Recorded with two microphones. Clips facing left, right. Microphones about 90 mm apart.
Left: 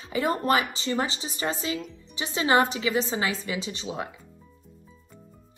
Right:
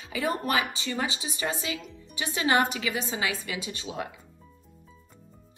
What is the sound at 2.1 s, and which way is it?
A woman's voice, 25° left (ahead or behind).